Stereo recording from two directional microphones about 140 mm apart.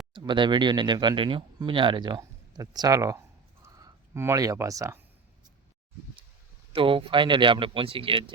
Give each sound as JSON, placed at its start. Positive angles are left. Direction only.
{"t": 0.1, "sound": "speech", "side_deg": -35}
{"t": 3.6, "sound": "a sound", "side_deg": -25}
{"t": 6.7, "sound": "speech", "side_deg": -35}